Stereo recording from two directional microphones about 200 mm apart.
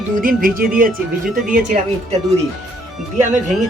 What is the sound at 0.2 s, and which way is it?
Speech, 45° right (ahead or behind).